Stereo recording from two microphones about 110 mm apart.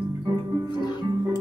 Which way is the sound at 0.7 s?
40° left (ahead or behind).